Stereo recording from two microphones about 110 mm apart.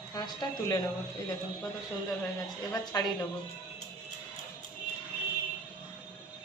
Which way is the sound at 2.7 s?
35° left (ahead or behind).